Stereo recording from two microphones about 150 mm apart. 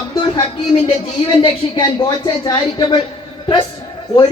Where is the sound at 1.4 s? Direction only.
30° left (ahead or behind).